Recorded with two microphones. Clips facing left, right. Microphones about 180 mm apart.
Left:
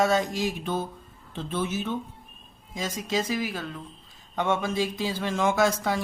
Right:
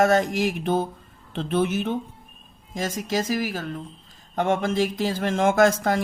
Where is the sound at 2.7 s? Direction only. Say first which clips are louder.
Right 3 dB; 45° right (ahead or behind).